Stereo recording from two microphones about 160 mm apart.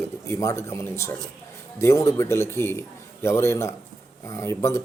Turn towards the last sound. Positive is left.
turn(degrees=15)  # may be behind; listen again after turning